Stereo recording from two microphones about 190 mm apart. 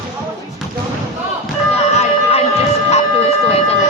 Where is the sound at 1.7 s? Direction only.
35° left (ahead or behind).